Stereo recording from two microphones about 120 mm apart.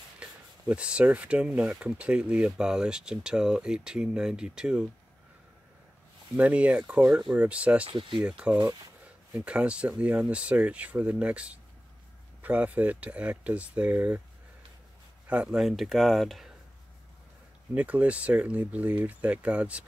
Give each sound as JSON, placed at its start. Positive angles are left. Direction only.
{"t": 0.2, "sound": "speech", "side_deg": -10}
{"t": 6.3, "sound": "speech", "side_deg": -10}
{"t": 7.8, "sound": "speech", "side_deg": -45}
{"t": 8.2, "sound": "speech", "side_deg": -10}
{"t": 15.2, "sound": "speech", "side_deg": -10}
{"t": 17.7, "sound": "speech", "side_deg": -10}